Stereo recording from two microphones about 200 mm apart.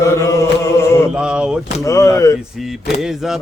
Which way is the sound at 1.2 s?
5° right (ahead or behind).